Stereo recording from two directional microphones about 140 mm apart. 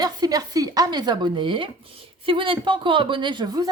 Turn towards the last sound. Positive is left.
turn(degrees=-30)  # may be behind; listen again after turning